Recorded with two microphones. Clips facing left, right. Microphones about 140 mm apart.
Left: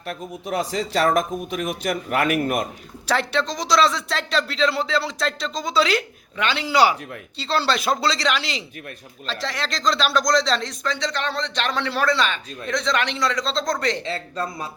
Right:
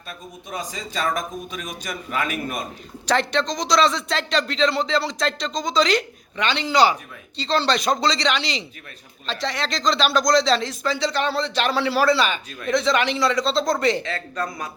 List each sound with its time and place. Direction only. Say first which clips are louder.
0.0 s speech: left 7 dB; 75° left (ahead or behind)
3.1 s speech: right 1 dB; 5° left (ahead or behind)
14.0 s speech: even; 30° left (ahead or behind)